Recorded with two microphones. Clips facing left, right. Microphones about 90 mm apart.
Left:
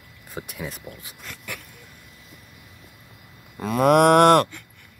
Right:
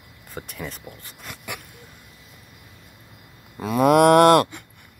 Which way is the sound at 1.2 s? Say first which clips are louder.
Right 2 dB; 15° right (ahead or behind).